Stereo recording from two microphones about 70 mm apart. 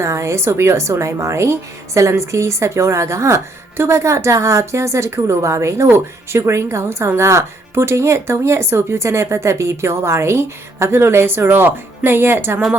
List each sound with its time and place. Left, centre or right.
0.0 s a woman's voice: right